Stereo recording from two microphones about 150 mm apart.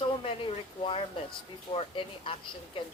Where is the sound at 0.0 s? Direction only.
40° left (ahead or behind).